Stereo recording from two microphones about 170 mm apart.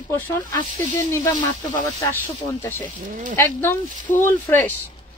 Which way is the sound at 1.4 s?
25° left (ahead or behind).